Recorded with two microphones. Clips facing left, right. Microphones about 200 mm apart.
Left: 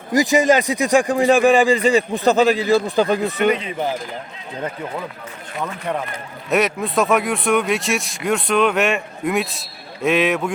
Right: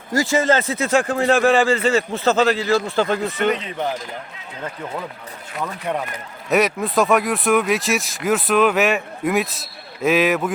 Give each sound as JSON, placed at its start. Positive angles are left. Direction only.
{"t": 0.1, "sound": "a man's voice", "side_deg": 15}
{"t": 3.5, "sound": "speech", "side_deg": 5}
{"t": 5.5, "sound": "speech", "side_deg": 0}